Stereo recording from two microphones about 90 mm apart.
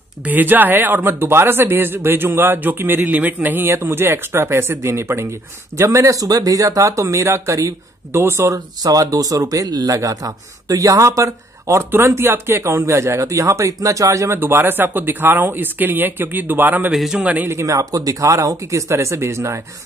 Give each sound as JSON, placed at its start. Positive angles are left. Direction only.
{"t": 0.2, "sound": "speech", "side_deg": -20}
{"t": 8.5, "sound": "speech", "side_deg": -45}
{"t": 16.9, "sound": "a man's voice", "side_deg": -5}
{"t": 17.2, "sound": "speech", "side_deg": -15}
{"t": 17.5, "sound": "speech", "side_deg": -35}